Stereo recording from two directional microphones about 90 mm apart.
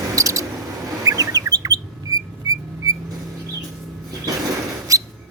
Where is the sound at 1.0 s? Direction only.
40° right (ahead or behind).